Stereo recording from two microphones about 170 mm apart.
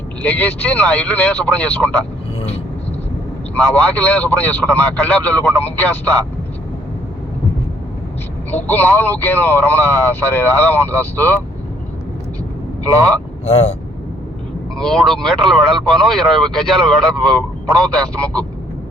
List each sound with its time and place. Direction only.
0.2 s a man's voice: 10° left (ahead or behind)
3.8 s a man's voice: 10° left (ahead or behind)
8.4 s a man's voice: 10° left (ahead or behind)
12.8 s a man's voice: 10° left (ahead or behind)
13.4 s speech: 35° left (ahead or behind)
14.8 s speech: 5° left (ahead or behind)